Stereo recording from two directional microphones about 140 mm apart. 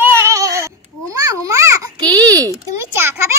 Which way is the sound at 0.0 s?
20° right (ahead or behind).